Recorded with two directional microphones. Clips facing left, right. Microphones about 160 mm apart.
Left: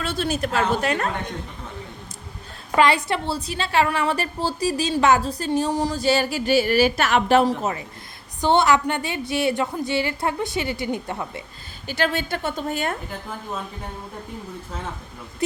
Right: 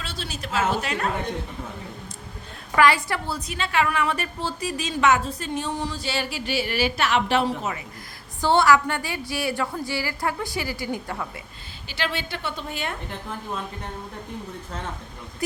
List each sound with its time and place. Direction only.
0.0 s a woman's voice: 55° left (ahead or behind)
2.7 s a woman's voice: 25° left (ahead or behind)
8.4 s a woman's voice: 20° left (ahead or behind)
11.9 s a woman's voice: 45° left (ahead or behind)